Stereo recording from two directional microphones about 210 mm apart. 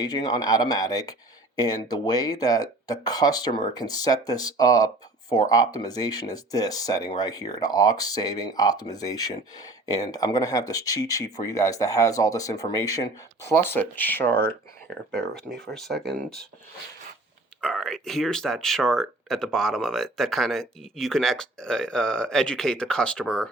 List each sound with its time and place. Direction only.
0.0 s speech: 20° left (ahead or behind); by 16.0 s centre (ahead or behind)
17.6 s speech: centre (ahead or behind)